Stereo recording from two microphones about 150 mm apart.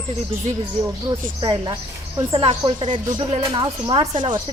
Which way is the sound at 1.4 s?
30° right (ahead or behind).